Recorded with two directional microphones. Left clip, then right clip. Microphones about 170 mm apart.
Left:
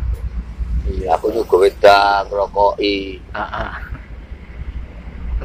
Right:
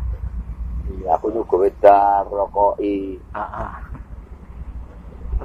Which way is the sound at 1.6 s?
35° right (ahead or behind).